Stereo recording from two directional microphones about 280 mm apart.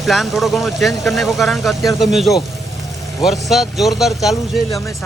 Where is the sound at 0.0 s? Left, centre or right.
Centre.